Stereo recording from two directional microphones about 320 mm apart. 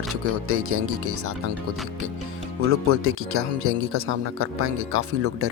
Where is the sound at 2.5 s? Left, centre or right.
Right.